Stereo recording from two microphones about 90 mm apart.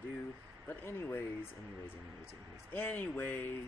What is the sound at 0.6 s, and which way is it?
Speech, 25° left (ahead or behind).